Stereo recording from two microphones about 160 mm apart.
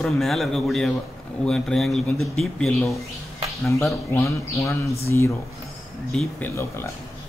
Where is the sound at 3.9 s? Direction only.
20° left (ahead or behind).